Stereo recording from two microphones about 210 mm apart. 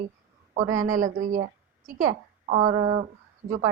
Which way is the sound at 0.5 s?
35° right (ahead or behind).